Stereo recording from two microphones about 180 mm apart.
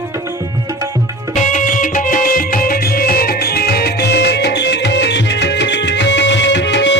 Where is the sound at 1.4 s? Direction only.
45° left (ahead or behind).